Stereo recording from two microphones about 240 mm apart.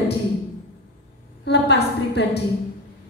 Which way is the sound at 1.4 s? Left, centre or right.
Left.